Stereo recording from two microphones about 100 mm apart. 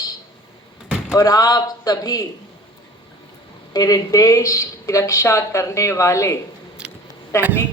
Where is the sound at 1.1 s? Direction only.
35° left (ahead or behind).